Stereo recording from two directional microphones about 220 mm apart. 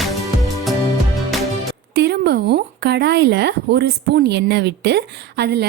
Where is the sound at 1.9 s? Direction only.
45° right (ahead or behind).